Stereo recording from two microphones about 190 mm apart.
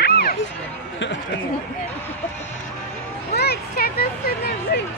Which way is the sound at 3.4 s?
55° left (ahead or behind).